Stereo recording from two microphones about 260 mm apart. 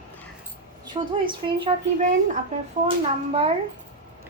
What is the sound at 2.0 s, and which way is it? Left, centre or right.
Speech, right.